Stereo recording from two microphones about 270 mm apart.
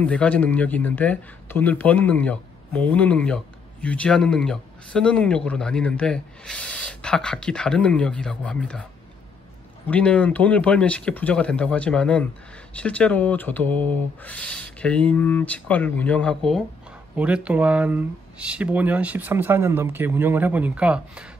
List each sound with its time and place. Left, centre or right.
0.0 s speech: centre
9.8 s speech: centre